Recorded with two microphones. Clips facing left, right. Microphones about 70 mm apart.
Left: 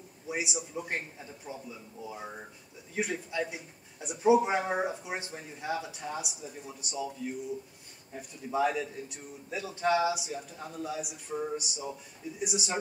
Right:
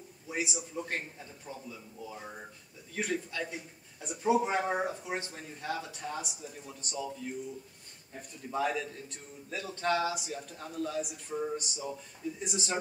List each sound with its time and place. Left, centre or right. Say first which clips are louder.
0.3 s a man's voice: left 1 dB; centre